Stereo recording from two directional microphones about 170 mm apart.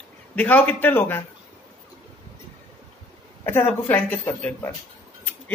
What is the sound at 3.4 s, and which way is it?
Speech, 15° left (ahead or behind).